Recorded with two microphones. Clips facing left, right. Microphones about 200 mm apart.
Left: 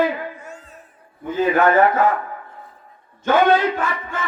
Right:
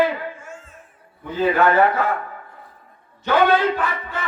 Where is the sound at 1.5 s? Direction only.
50° left (ahead or behind).